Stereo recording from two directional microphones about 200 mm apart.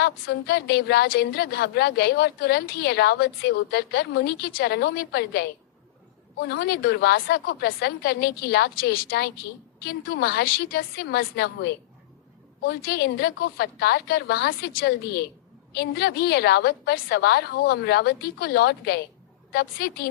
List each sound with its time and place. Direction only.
0.0 s a woman's voice: 55° left (ahead or behind)
6.5 s a woman's voice: 50° left (ahead or behind)